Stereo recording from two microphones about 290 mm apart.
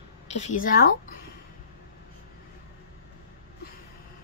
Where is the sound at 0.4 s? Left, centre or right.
Left.